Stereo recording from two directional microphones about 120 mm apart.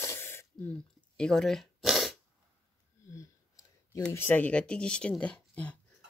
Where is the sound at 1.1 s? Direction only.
5° left (ahead or behind).